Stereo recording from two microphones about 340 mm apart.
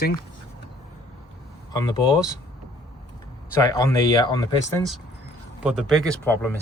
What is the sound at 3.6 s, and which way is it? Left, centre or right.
Speech, centre.